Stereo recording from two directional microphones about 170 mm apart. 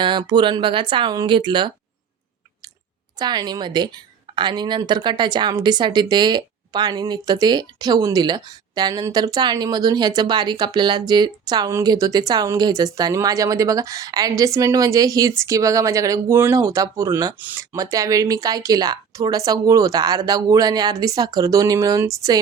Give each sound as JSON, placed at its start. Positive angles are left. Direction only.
{"t": 0.0, "sound": "a woman's voice", "side_deg": -30}
{"t": 3.2, "sound": "a woman's voice", "side_deg": -25}